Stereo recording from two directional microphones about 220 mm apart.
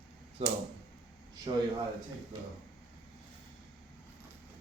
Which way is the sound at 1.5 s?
20° right (ahead or behind).